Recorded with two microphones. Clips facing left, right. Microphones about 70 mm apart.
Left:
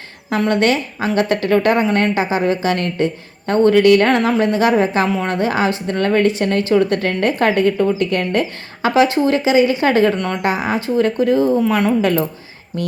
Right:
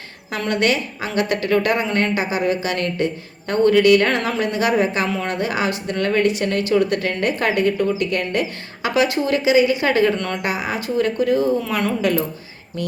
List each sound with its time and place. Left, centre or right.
0.3 s speech: left
11.6 s a woman's voice: left